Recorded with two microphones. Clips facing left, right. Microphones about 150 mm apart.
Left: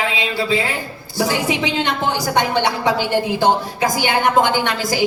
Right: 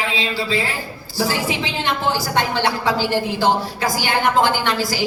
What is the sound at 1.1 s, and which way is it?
A woman's voice, 20° left (ahead or behind).